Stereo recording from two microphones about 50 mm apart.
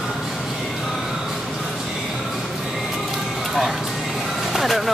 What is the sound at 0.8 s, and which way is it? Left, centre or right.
Music, centre.